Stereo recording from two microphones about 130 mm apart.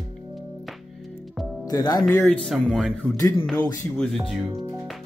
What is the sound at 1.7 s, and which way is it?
Speech, 30° left (ahead or behind).